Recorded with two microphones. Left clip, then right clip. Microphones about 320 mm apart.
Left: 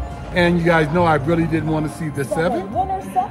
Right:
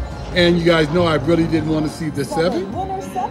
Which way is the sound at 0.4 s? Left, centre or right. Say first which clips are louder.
Right 2 dB; centre.